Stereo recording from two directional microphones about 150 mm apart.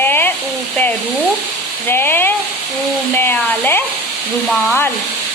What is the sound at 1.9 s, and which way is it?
Speech, 15° left (ahead or behind).